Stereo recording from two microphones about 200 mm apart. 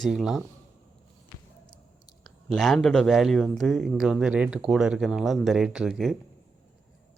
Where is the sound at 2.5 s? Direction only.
Centre (ahead or behind).